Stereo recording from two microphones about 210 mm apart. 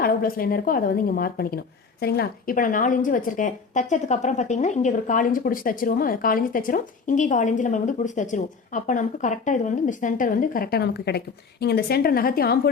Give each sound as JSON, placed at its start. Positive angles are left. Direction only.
{"t": 0.0, "sound": "a woman's voice", "side_deg": 45}